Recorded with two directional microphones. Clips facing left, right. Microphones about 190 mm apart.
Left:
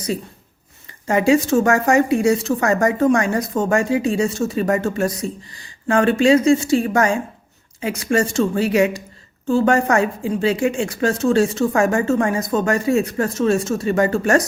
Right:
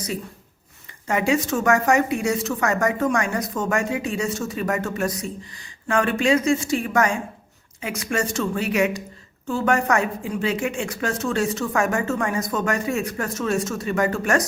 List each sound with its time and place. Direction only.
1.0 s a woman's voice: 30° left (ahead or behind)